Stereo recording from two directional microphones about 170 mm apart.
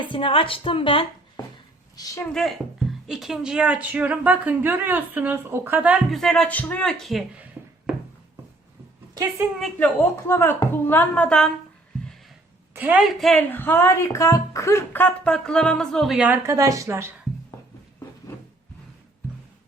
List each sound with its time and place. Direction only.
0.0 s a woman's voice: 30° left (ahead or behind)
2.3 s speech: centre (ahead or behind)
9.7 s a woman's voice: 10° left (ahead or behind)
12.7 s speech: 10° right (ahead or behind)